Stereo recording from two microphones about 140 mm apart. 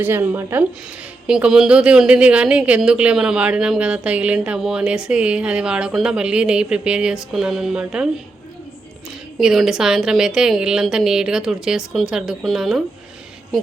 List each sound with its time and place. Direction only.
0.0 s a woman's voice: 15° right (ahead or behind)
1.3 s a woman's voice: 5° right (ahead or behind)
9.4 s a woman's voice: 5° right (ahead or behind)